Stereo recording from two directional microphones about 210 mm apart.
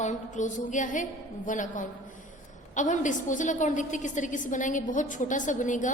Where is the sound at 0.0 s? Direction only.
35° left (ahead or behind).